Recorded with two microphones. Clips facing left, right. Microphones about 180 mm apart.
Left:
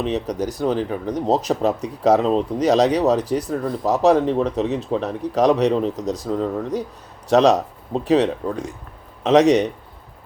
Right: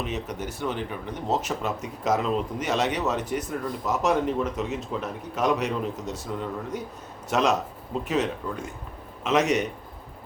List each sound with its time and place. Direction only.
0.0 s speech: 35° left (ahead or behind)